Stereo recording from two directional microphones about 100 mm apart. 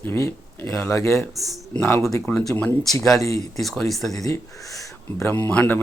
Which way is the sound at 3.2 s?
35° left (ahead or behind).